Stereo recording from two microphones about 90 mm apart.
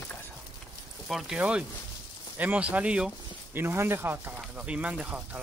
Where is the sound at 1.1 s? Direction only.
5° right (ahead or behind).